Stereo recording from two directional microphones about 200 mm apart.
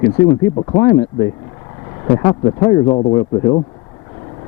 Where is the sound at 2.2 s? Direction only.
25° left (ahead or behind).